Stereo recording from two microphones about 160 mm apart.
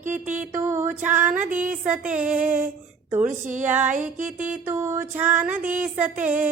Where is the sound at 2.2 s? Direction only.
55° right (ahead or behind).